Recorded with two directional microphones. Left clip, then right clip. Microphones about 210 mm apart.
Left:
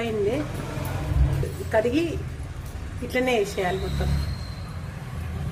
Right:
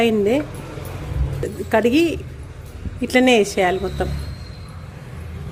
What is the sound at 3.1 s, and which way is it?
Speech, 45° right (ahead or behind).